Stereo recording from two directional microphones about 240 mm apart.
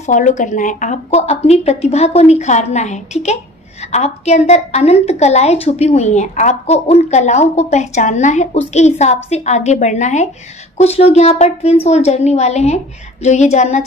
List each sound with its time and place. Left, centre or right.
0.0 s a woman's voice: left